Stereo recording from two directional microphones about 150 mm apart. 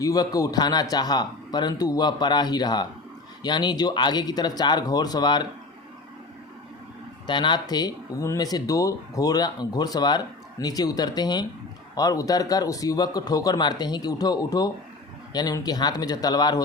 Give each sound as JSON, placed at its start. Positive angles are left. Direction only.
{"t": 0.0, "sound": "speech", "side_deg": 25}
{"t": 7.3, "sound": "speech", "side_deg": 30}